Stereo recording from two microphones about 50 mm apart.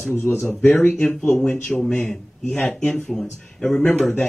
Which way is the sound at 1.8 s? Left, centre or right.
Centre.